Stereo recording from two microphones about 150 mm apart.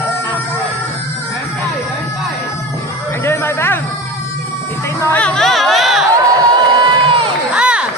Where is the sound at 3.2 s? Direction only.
15° left (ahead or behind).